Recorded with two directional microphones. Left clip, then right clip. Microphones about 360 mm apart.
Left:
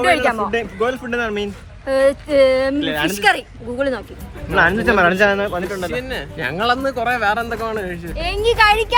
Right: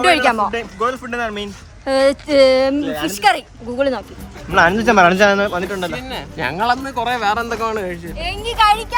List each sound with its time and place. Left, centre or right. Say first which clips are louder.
0.0 s speech: right 2 dB; right
0.5 s speech: left 1 dB; centre
1.8 s speech: right 1 dB; right
3.2 s speech: right 4 dB; centre; by 5.9 s right
5.9 s speech: left 2 dB; centre
8.1 s speech: left 6 dB; centre